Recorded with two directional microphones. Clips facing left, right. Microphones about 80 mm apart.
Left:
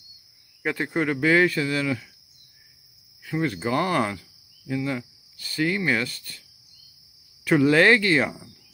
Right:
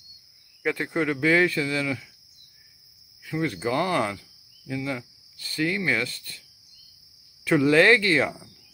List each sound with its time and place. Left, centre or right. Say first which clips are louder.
0.7 s speech: left 1 dB; left
3.3 s speech: left 1 dB; left
4.8 s cricket: left 2 dB; left
5.7 s speech: left 2 dB; left
7.4 s speech: left 1 dB; centre